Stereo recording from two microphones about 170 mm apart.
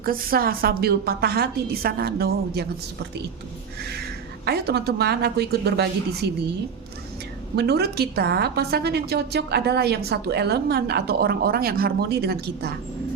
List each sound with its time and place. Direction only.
0.0 s a woman's voice: 60° right (ahead or behind)
4.4 s a woman's voice: 75° right (ahead or behind)
7.5 s a woman's voice: 75° right (ahead or behind)